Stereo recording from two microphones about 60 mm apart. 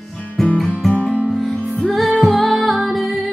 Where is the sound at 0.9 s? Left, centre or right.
Left.